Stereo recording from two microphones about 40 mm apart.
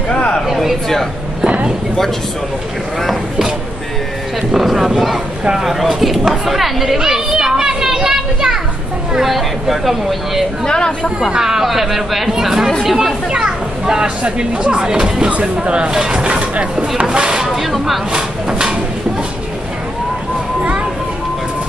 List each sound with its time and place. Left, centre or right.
0.1 s a sound: left
0.5 s speech: centre
1.4 s a sound: right
4.6 s speech: centre
6.2 s children playing: centre
9.2 s speech: centre
10.6 s speech: centre
11.3 s speech: centre
13.3 s speech: centre
17.6 s speech: centre
18.1 s speech: right